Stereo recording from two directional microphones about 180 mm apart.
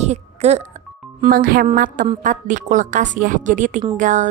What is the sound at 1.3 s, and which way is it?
Speech, 50° right (ahead or behind).